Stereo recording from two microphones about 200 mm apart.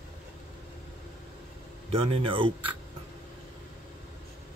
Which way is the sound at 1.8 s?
30° right (ahead or behind).